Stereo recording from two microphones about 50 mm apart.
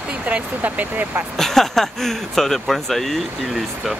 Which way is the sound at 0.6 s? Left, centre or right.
Right.